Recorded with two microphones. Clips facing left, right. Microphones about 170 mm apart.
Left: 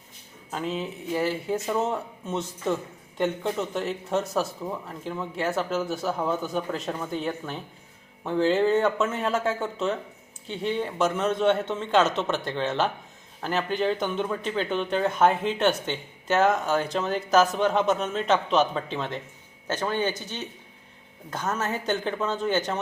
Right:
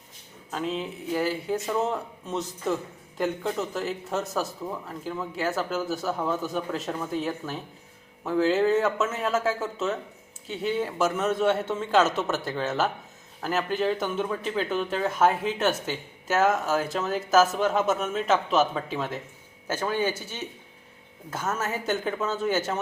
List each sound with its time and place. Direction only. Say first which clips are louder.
0.5 s a man's voice: even; centre (ahead or behind)